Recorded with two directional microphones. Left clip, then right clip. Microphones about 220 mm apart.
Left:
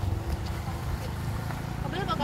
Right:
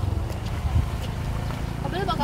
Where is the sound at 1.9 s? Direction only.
30° right (ahead or behind).